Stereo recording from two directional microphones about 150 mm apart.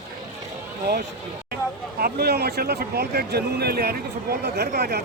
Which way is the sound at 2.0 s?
90° right.